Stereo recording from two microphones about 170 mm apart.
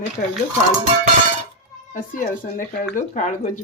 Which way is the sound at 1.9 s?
55° left (ahead or behind).